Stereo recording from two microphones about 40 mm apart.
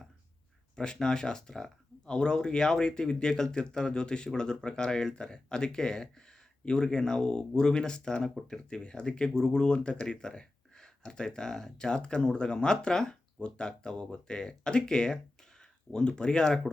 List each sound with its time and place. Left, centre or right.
0.8 s speech: left